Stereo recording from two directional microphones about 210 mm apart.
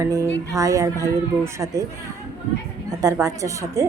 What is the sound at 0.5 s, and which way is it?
Speech, 15° right (ahead or behind).